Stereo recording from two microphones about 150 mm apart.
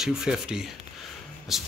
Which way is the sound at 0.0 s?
5° right (ahead or behind).